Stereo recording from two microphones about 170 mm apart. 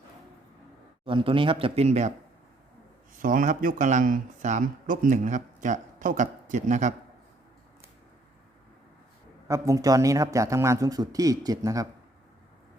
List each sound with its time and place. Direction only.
1.0 s speech: 30° right (ahead or behind)
3.2 s speech: 55° right (ahead or behind)
9.5 s speech: 20° right (ahead or behind)